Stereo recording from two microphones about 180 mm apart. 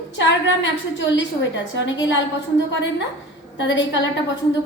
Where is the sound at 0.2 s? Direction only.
90° left.